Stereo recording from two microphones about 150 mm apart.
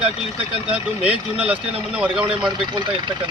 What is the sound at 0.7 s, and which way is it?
Speech, 5° right (ahead or behind).